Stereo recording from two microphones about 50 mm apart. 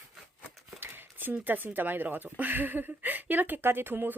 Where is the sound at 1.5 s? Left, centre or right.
Right.